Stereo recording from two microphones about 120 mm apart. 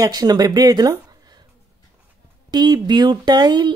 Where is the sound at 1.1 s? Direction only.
35° right (ahead or behind).